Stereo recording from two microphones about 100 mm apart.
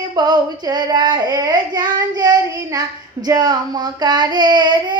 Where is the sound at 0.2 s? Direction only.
45° right (ahead or behind).